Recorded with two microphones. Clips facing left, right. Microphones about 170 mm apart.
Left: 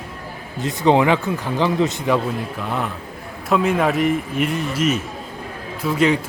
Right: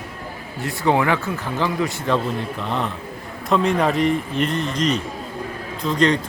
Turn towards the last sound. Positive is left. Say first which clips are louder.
# left 1 dB
turn(degrees=5)  # may be behind; listen again after turning